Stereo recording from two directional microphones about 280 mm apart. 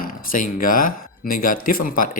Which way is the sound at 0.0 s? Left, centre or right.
Left.